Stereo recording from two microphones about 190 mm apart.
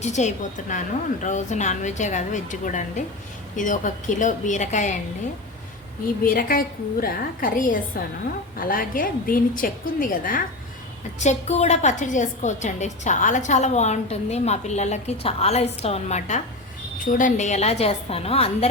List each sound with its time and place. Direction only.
0.0 s a woman's voice: 40° left (ahead or behind)
6.2 s a woman's voice: 45° left (ahead or behind); by 18.7 s 30° left (ahead or behind)